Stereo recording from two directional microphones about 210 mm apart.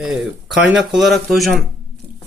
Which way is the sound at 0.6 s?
5° right (ahead or behind).